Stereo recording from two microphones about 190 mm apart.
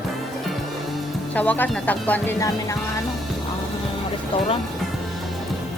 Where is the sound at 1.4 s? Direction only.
10° left (ahead or behind).